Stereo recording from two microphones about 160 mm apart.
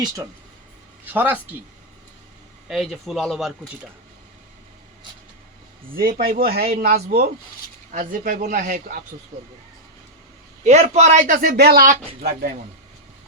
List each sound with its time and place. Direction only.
1.0 s speech: 10° right (ahead or behind)
2.6 s speech: centre (ahead or behind)
5.9 s speech: 65° right (ahead or behind)
6.8 s speech: 75° right (ahead or behind)
7.9 s a man's voice: 60° right (ahead or behind)
10.6 s a man's voice: 45° right (ahead or behind)
11.3 s speech: 75° right (ahead or behind)